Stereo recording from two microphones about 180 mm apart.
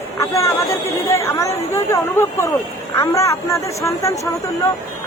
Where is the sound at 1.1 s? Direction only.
15° left (ahead or behind).